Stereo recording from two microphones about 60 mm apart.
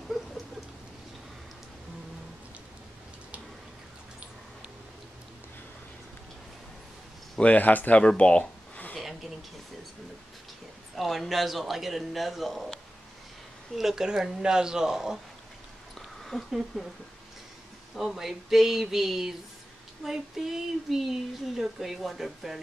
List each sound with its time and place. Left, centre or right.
7.3 s speech: left
8.0 s a sound: centre
11.0 s speech: centre
16.2 s a woman's voice: centre
17.9 s speech: centre